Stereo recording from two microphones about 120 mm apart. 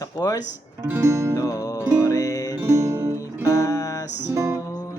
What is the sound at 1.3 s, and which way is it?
Music, 30° left (ahead or behind).